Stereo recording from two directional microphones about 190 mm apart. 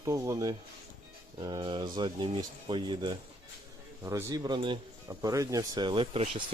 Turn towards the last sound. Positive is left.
turn(degrees=-35)  # may be behind; listen again after turning